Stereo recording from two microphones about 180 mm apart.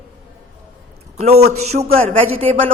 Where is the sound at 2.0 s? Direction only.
30° right (ahead or behind).